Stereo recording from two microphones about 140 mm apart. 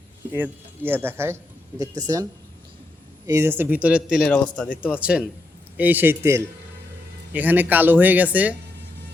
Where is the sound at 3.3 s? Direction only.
15° right (ahead or behind).